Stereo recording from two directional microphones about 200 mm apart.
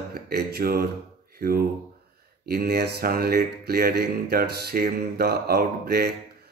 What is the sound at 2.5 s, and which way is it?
Speech, 50° right (ahead or behind).